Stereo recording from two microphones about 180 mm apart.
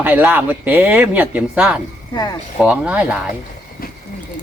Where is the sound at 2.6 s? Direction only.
5° right (ahead or behind).